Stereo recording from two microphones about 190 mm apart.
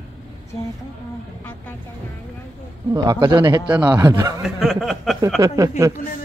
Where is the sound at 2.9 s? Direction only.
20° right (ahead or behind).